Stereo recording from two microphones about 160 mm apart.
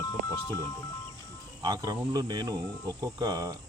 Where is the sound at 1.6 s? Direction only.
25° right (ahead or behind).